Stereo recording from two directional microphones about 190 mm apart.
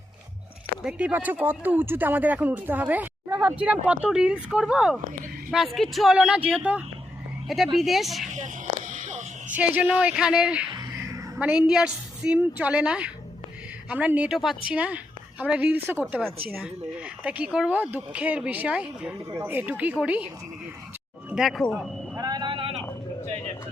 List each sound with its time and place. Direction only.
0.9 s a woman's voice: 10° right (ahead or behind)
8.3 s a sound: 40° right (ahead or behind)
9.6 s a woman's voice: 5° right (ahead or behind)
10.7 s a woman's voice: 20° right (ahead or behind)
21.2 s speech: 5° right (ahead or behind)
22.1 s a sound: 20° right (ahead or behind)